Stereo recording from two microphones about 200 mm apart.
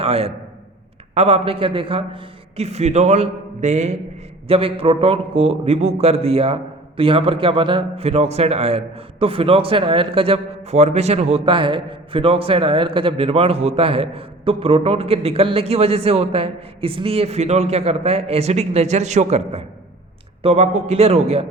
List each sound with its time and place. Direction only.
0.0 s a man's voice: 30° right (ahead or behind)